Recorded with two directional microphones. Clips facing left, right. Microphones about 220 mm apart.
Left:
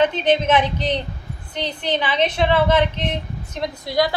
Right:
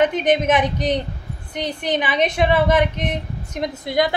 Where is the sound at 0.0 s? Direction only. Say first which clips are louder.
Right 1 dB; 15° right (ahead or behind).